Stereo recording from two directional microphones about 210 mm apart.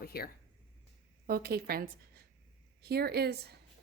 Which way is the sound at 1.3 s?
45° right (ahead or behind).